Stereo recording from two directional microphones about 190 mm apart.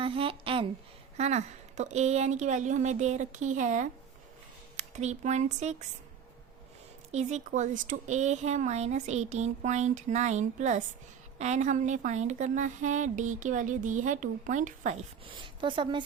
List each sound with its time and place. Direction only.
0.0 s a sound: 30° right (ahead or behind)
1.1 s speech: 35° right (ahead or behind)
7.1 s speech: 35° right (ahead or behind)
15.3 s speech: 25° right (ahead or behind)